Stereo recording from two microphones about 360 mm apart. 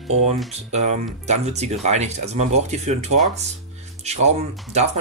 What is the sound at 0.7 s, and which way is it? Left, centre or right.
Speech, centre.